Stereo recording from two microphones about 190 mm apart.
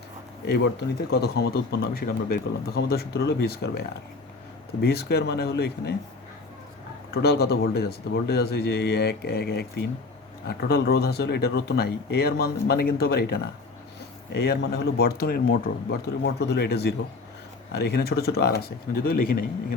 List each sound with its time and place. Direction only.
0.4 s speech: 60° left (ahead or behind)
7.1 s speech: 55° left (ahead or behind)